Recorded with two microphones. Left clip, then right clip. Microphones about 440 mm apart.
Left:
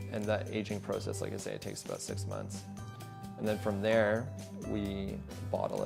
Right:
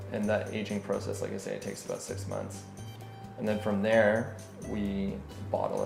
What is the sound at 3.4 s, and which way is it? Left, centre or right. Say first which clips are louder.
Speech: right 3 dB; left.